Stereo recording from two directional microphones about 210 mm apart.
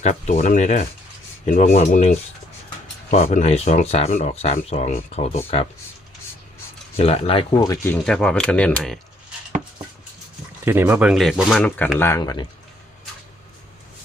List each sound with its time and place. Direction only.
0.0 s speech: 35° left (ahead or behind)
6.9 s speech: 30° left (ahead or behind)
7.9 s speech: 5° left (ahead or behind)
10.7 s speech: 10° right (ahead or behind); by 12.5 s 15° left (ahead or behind)